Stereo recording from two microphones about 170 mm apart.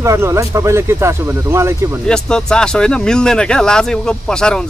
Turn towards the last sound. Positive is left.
turn(degrees=5)  # may be behind; listen again after turning